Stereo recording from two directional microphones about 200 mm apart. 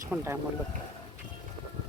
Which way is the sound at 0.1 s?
10° right (ahead or behind).